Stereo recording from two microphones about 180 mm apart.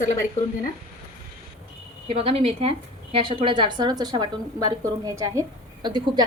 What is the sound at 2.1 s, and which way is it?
A woman's voice, 35° right (ahead or behind).